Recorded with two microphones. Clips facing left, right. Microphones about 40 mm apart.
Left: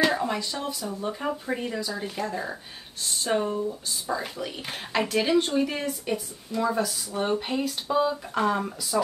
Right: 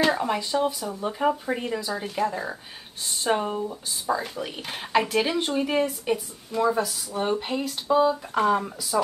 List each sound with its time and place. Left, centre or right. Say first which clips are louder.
0.0 s speech: right 1 dB; centre
3.4 s speech: left 1 dB; right
4.4 s speech: right 1 dB; centre
5.6 s speech: right 3 dB; centre
8.9 s speech: right 2 dB; centre